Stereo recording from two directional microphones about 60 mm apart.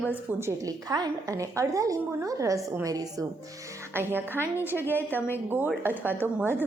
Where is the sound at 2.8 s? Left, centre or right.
Right.